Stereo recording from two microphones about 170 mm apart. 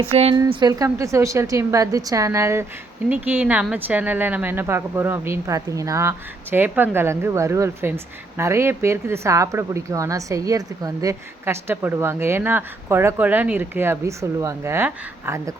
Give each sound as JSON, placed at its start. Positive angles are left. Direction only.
{"t": 0.1, "sound": "speech", "side_deg": -35}
{"t": 0.3, "sound": "a woman's voice", "side_deg": -25}